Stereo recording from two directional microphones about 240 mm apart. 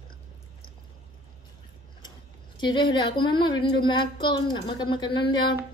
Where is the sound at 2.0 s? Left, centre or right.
Centre.